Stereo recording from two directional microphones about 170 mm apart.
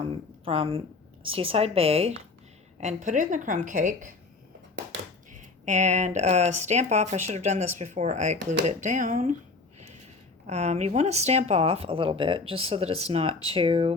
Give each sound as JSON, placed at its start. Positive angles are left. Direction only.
{"t": 0.0, "sound": "a woman's voice", "side_deg": -35}
{"t": 2.8, "sound": "speech", "side_deg": -45}
{"t": 5.3, "sound": "speech", "side_deg": -45}
{"t": 10.4, "sound": "speech", "side_deg": -40}